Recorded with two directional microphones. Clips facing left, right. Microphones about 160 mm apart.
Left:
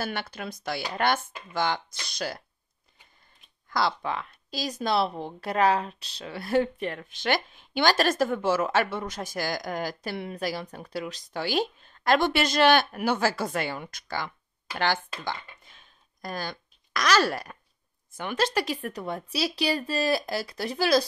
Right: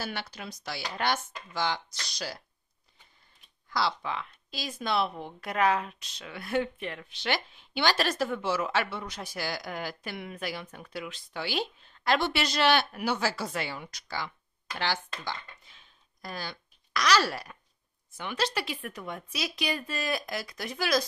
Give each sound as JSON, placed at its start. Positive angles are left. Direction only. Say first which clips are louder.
{"t": 0.0, "sound": "speech", "louder": "left 4 dB", "side_deg": 55}
{"t": 3.6, "sound": "speech", "louder": "left 3 dB", "side_deg": 50}
{"t": 15.6, "sound": "babbling", "louder": "left 3 dB", "side_deg": 50}
{"t": 18.1, "sound": "speech", "louder": "left 5 dB", "side_deg": 50}